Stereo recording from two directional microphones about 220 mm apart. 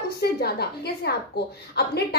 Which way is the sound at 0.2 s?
45° left (ahead or behind).